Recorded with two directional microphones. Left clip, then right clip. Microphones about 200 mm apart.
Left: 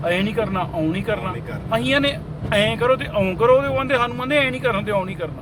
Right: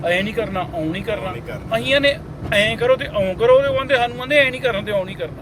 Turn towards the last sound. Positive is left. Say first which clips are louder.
# right 1 dB
turn(degrees=20)  # may be behind; listen again after turning